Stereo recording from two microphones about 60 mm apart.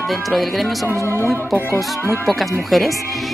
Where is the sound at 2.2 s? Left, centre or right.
Centre.